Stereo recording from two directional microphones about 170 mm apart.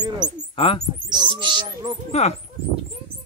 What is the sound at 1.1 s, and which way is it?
Speech, 25° right (ahead or behind).